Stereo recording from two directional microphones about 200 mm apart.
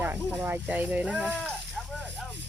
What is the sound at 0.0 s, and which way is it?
Speech, 10° right (ahead or behind).